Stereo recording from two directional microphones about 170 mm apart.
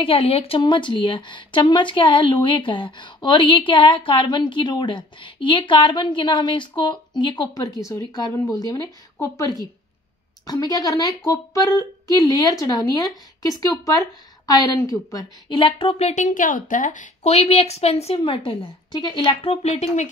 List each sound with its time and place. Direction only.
0.0 s a woman's voice: 35° left (ahead or behind)